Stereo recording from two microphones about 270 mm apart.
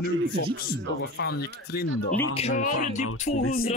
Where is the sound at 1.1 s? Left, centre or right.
Left.